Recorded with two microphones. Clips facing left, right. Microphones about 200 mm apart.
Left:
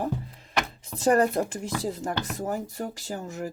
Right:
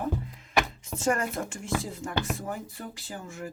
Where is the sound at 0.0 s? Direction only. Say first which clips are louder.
Left 2 dB; 35° left (ahead or behind).